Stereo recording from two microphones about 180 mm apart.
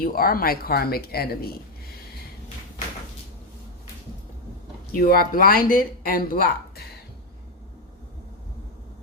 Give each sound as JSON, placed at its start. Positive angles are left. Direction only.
{"t": 0.0, "sound": "speech", "side_deg": 55}
{"t": 4.9, "sound": "speech", "side_deg": 55}